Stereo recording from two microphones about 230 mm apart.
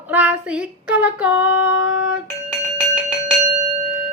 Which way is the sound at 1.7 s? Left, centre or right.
Left.